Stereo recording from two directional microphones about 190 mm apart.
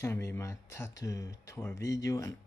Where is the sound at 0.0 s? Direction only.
15° left (ahead or behind).